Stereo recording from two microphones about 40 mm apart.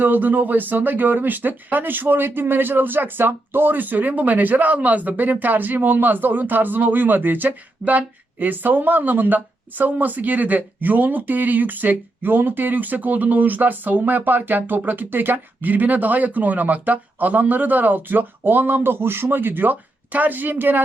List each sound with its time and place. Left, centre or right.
0.0 s speech: right